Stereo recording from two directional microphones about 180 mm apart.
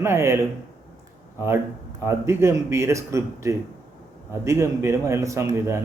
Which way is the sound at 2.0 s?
15° right (ahead or behind).